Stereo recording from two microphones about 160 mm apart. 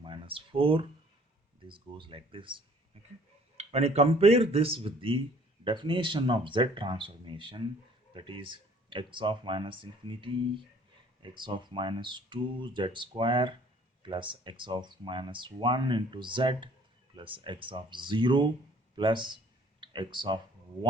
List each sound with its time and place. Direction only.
0.0 s a sound: 35° right (ahead or behind)
1.6 s speech: 30° right (ahead or behind)
3.6 s speech: 40° right (ahead or behind)